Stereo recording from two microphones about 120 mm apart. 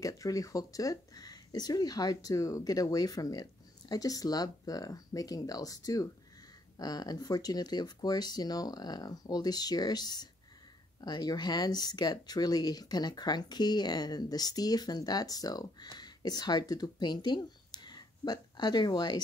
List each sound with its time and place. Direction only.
0.0 s speech: 30° left (ahead or behind)